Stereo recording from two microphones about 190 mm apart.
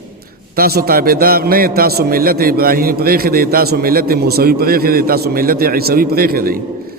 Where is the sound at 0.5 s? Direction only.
50° right (ahead or behind).